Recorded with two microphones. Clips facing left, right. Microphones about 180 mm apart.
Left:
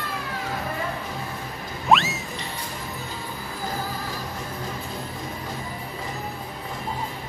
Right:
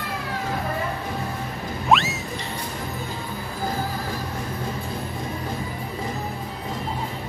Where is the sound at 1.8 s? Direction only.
Centre (ahead or behind).